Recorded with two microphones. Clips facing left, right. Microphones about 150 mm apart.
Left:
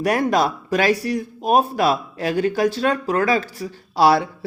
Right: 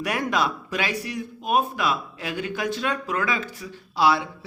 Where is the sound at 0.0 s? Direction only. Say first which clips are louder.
Left 6 dB; 40° left (ahead or behind).